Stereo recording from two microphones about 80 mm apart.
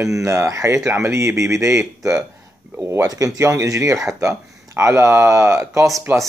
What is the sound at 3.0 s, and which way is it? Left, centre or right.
Speech, right.